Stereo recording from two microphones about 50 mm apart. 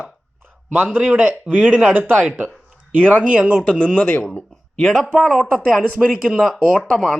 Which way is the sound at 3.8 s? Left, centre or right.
Centre.